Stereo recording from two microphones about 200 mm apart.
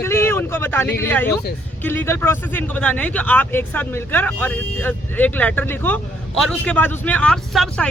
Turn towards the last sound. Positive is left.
turn(degrees=0)  # may be behind; listen again after turning